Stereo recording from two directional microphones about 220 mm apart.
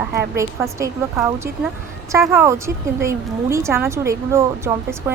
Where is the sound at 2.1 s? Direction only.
15° right (ahead or behind).